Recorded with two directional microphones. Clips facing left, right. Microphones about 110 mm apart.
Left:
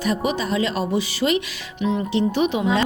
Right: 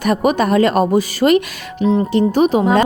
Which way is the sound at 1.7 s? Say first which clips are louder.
Right 7 dB; 35° right (ahead or behind).